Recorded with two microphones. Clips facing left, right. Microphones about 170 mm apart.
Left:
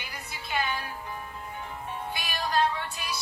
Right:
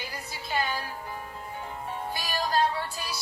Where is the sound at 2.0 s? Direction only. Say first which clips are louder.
Right 3 dB; 35° right (ahead or behind).